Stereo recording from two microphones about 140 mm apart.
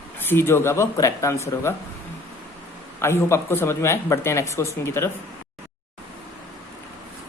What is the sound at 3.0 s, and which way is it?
Speech, 20° left (ahead or behind).